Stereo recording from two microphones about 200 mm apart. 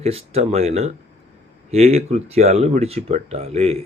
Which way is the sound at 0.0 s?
30° right (ahead or behind).